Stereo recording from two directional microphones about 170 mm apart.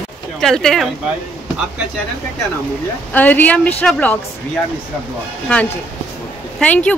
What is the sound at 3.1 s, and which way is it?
A woman's voice, 10° left (ahead or behind).